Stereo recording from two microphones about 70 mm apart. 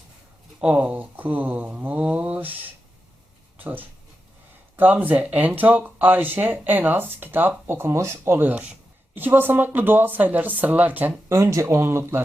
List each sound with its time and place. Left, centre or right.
0.6 s speech: centre
3.6 s speech: right
11.3 s speech: right